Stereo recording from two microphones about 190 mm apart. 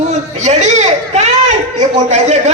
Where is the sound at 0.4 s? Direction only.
35° right (ahead or behind).